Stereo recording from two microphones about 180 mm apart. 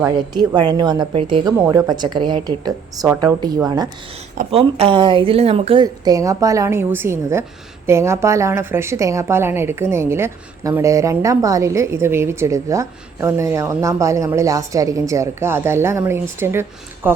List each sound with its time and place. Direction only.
0.0 s a woman's voice: 25° right (ahead or behind)
1.5 s a woman's voice: 10° right (ahead or behind)
1.9 s a woman's voice: 25° right (ahead or behind)
4.5 s a woman's voice: 30° right (ahead or behind); by 17.2 s 10° right (ahead or behind)